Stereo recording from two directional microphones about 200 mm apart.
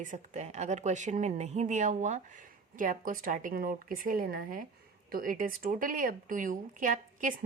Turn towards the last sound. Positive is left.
turn(degrees=-40)  # may be behind; listen again after turning